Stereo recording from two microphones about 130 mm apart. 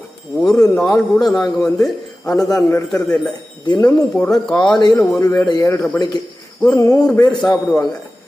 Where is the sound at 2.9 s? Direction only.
10° left (ahead or behind).